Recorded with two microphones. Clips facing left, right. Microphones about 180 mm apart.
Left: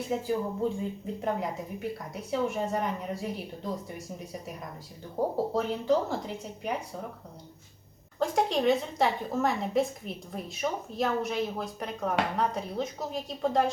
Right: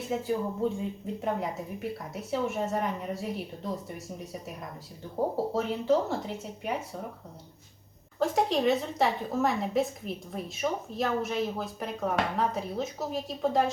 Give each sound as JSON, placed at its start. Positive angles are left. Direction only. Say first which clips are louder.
{"t": 0.3, "sound": "a woman's voice", "louder": "right 2 dB", "side_deg": 0}
{"t": 5.5, "sound": "a woman's voice", "louder": "right 1 dB", "side_deg": 0}
{"t": 8.2, "sound": "a woman's voice", "louder": "right 1 dB", "side_deg": 0}